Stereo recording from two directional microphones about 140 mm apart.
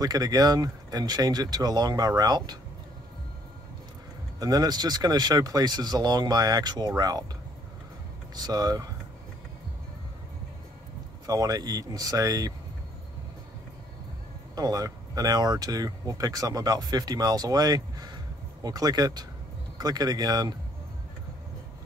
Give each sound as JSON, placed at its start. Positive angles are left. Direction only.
{"t": 0.0, "sound": "speech", "side_deg": -25}
{"t": 4.4, "sound": "speech", "side_deg": -25}
{"t": 8.4, "sound": "speech", "side_deg": -30}
{"t": 11.2, "sound": "speech", "side_deg": -25}
{"t": 14.5, "sound": "speech", "side_deg": -25}